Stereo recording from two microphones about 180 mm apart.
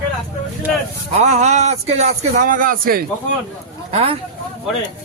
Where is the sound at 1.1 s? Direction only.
40° right (ahead or behind); by 3.3 s 55° right (ahead or behind).